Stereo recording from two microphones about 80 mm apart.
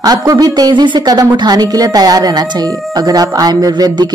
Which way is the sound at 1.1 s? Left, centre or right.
Right.